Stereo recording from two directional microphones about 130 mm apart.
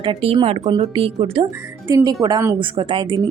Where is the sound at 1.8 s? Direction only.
30° right (ahead or behind).